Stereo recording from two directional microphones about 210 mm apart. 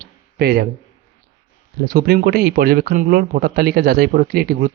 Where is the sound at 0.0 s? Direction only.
45° right (ahead or behind).